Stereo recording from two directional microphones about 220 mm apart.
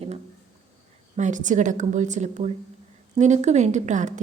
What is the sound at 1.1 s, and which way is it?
A woman's voice, 35° right (ahead or behind).